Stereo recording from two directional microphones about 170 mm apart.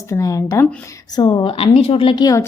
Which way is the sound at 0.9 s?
25° left (ahead or behind).